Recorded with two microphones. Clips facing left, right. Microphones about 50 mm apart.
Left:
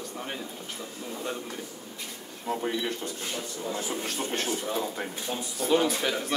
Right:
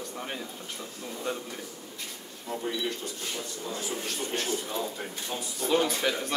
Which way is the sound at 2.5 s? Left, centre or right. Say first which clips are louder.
Left 2 dB; left.